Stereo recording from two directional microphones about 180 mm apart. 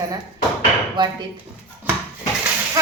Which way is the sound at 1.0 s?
25° right (ahead or behind).